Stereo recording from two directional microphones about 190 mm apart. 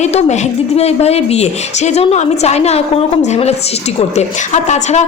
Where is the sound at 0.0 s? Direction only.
35° left (ahead or behind).